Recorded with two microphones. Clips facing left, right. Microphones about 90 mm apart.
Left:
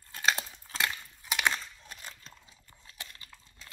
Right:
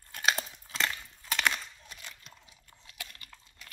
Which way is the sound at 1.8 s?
40° left (ahead or behind).